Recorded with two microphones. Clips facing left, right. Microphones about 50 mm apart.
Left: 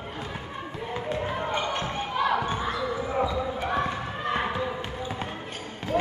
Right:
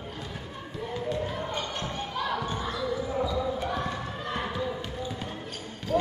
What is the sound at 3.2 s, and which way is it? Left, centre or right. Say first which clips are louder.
Basketball bounce: left 1 dB; centre.